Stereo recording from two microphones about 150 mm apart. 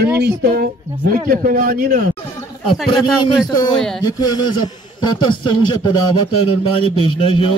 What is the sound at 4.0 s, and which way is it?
A man's voice, 25° left (ahead or behind).